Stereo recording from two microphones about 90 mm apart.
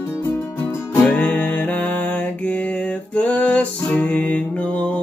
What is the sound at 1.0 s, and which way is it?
Music, 20° left (ahead or behind).